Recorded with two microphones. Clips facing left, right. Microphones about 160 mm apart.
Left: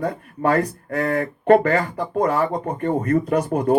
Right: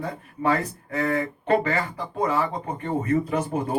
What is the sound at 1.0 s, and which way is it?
Speech, 55° left (ahead or behind).